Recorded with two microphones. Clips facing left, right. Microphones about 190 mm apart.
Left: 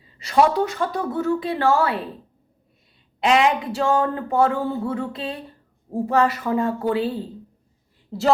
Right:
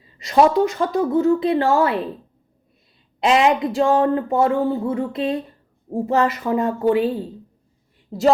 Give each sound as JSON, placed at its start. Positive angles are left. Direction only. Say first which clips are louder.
{"t": 0.3, "sound": "speech", "louder": "right 3 dB", "side_deg": -20}
{"t": 3.2, "sound": "speech", "louder": "right 2 dB", "side_deg": -25}